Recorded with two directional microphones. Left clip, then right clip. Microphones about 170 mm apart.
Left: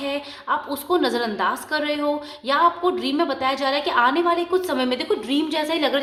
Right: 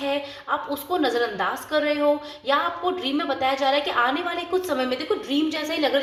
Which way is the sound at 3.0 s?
30° left (ahead or behind).